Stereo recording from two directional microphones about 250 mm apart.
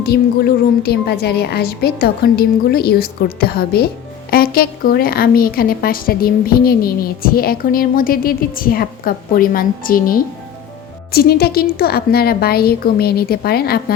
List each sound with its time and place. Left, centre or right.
0.0 s a woman's voice: left